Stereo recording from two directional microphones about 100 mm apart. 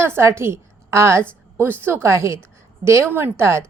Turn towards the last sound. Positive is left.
turn(degrees=-25)  # may be behind; listen again after turning